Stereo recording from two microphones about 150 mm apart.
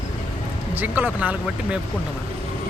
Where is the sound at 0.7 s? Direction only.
10° right (ahead or behind).